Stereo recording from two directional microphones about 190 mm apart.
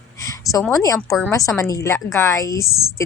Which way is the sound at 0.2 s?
15° left (ahead or behind).